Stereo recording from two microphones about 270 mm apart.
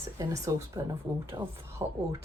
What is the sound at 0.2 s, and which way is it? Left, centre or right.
A woman's voice, centre.